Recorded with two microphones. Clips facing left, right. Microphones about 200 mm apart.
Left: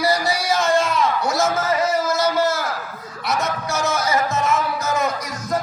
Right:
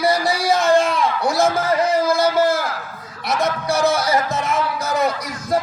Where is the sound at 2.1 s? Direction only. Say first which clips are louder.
Right 3 dB; 55° right (ahead or behind).